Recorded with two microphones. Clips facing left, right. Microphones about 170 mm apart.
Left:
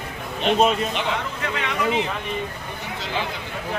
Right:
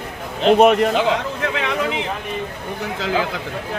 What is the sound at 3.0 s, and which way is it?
Speech, 90° right.